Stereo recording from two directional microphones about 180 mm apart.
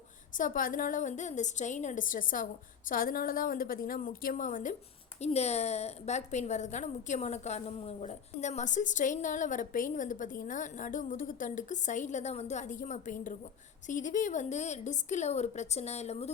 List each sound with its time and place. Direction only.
0.3 s a woman's voice: 50° left (ahead or behind)